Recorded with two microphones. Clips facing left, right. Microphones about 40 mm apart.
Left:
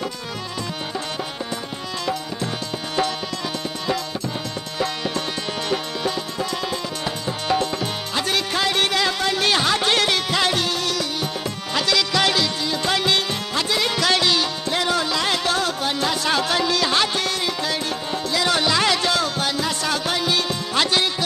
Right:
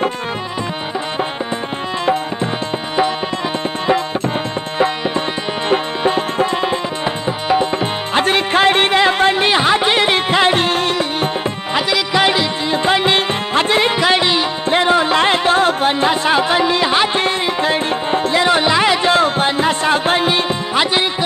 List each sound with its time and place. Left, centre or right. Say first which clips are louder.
4.7 s tabla: right 8 dB; right
5.7 s music: right 10 dB; right
8.1 s music: right 9 dB; right
11.7 s music: right 4 dB; right